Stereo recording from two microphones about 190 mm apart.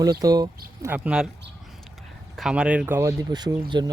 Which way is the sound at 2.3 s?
5° right (ahead or behind).